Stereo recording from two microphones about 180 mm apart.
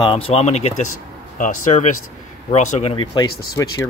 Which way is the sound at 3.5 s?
15° left (ahead or behind).